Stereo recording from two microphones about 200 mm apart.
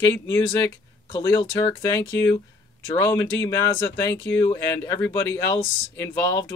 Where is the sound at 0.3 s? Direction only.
10° left (ahead or behind).